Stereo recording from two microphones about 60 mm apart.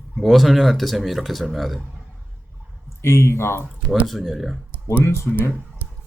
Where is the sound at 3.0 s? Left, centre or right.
Left.